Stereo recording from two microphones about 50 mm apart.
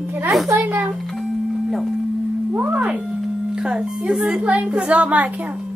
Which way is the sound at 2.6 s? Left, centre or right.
Right.